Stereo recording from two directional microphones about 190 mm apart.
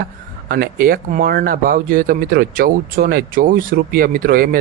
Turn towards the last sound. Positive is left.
turn(degrees=-50)  # may be behind; listen again after turning